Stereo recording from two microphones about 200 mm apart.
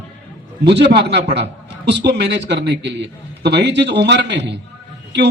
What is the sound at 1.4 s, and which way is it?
A man's voice, 60° right (ahead or behind).